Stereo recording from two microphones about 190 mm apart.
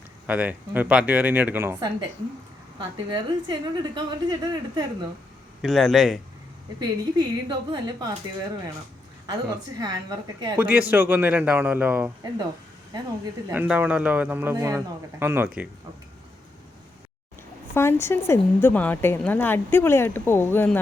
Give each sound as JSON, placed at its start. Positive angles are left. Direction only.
{"t": 0.3, "sound": "a man's voice", "side_deg": -10}
{"t": 2.7, "sound": "a woman's voice", "side_deg": -25}
{"t": 5.6, "sound": "a man's voice", "side_deg": 0}
{"t": 6.7, "sound": "a woman's voice", "side_deg": -20}
{"t": 9.2, "sound": "a woman's voice", "side_deg": -20}
{"t": 10.7, "sound": "a man's voice", "side_deg": -10}
{"t": 12.9, "sound": "a woman's voice", "side_deg": -25}
{"t": 13.5, "sound": "a man's voice", "side_deg": -10}
{"t": 17.7, "sound": "a woman's voice", "side_deg": 15}